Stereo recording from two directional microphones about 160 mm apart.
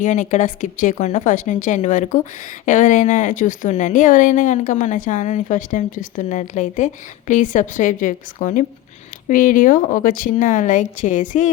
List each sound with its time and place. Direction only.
0.0 s speech: 50° left (ahead or behind)